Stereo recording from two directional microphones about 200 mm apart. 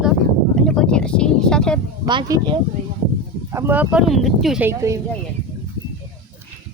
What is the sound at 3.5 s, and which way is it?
Speech, 10° right (ahead or behind).